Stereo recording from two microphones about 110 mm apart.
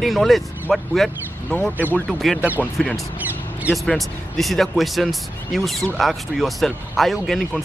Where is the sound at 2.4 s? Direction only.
15° right (ahead or behind).